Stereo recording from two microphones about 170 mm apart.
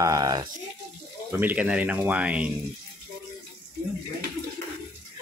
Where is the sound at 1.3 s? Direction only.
10° right (ahead or behind).